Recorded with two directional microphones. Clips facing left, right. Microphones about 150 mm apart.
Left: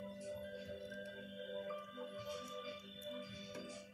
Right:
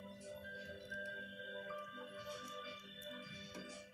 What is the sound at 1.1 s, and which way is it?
Music, 5° left (ahead or behind).